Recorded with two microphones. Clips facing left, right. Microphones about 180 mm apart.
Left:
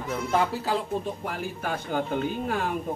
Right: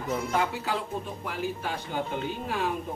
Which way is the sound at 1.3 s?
50° left (ahead or behind).